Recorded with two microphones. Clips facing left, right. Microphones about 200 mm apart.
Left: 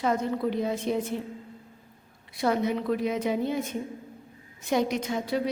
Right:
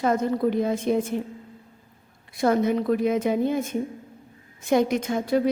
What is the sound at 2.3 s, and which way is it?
A woman's voice, 50° right (ahead or behind).